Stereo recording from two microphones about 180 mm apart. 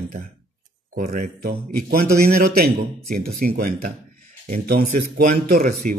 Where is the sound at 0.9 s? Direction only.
50° right (ahead or behind).